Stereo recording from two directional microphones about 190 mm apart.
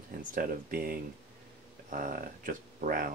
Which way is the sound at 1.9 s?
45° right (ahead or behind).